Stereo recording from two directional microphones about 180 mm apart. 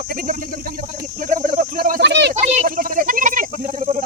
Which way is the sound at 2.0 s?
70° right (ahead or behind).